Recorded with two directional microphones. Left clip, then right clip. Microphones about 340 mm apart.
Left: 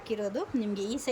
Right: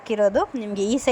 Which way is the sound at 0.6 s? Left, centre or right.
Centre.